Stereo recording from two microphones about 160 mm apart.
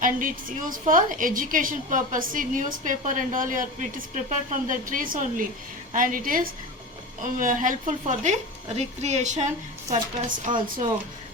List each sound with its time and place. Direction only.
0.0 s a woman's voice: 60° right (ahead or behind)